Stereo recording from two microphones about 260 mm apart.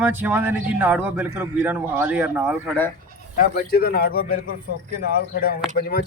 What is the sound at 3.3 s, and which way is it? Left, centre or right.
Speech, left.